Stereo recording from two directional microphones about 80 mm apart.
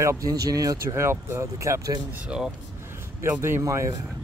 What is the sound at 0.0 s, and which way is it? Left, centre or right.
Speech, right.